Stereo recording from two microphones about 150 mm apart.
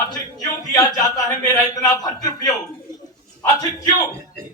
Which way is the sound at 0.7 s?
25° left (ahead or behind).